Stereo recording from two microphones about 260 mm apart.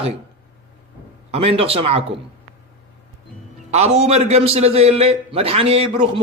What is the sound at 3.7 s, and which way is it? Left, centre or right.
A man's voice, right.